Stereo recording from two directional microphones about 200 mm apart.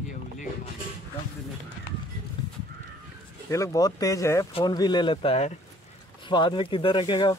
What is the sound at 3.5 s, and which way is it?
Speech, 15° left (ahead or behind).